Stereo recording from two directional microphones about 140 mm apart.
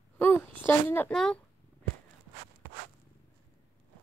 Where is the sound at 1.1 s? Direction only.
5° left (ahead or behind).